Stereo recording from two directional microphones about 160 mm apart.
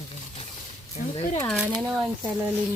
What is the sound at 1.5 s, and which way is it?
Speech, 5° right (ahead or behind).